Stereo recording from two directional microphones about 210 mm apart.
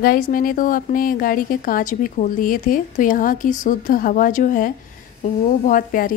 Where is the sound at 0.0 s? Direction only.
45° left (ahead or behind).